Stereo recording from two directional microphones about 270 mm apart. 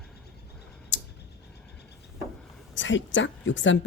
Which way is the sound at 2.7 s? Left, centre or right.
Left.